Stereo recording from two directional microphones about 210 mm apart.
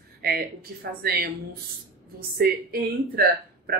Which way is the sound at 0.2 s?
45° right (ahead or behind).